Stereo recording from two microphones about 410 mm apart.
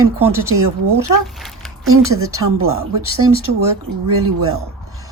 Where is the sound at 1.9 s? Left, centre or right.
Right.